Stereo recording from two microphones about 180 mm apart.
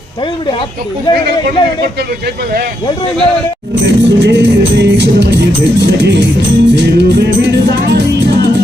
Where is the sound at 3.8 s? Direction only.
75° right (ahead or behind).